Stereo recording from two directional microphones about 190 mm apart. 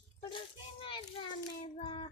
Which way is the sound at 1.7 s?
30° left (ahead or behind).